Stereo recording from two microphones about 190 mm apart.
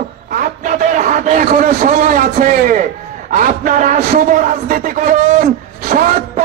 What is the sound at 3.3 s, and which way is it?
Speech, 45° right (ahead or behind).